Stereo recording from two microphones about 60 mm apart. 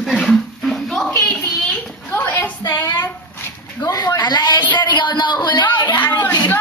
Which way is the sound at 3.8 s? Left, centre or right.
Left.